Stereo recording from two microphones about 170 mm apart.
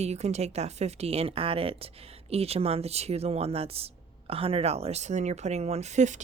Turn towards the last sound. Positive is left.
turn(degrees=-45)  # may be behind; listen again after turning